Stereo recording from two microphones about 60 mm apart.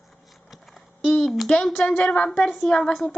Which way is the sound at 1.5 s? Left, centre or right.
Centre.